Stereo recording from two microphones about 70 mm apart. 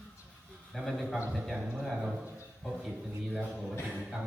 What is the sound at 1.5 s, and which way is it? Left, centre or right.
Speech, centre.